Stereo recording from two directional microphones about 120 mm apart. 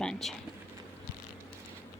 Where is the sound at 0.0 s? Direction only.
5° left (ahead or behind).